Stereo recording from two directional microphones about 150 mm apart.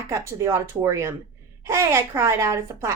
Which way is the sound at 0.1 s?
20° right (ahead or behind).